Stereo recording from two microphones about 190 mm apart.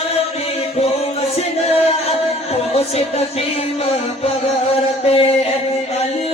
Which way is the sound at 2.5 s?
30° left (ahead or behind).